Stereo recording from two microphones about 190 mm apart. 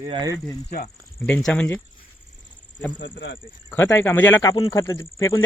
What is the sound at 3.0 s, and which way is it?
Speech, 75° left (ahead or behind).